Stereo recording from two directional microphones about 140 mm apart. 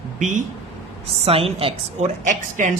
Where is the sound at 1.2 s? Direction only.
45° right (ahead or behind).